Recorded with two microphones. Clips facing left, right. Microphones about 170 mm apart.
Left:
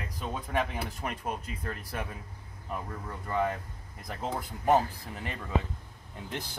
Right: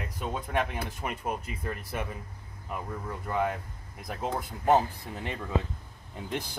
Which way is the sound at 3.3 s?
5° right (ahead or behind).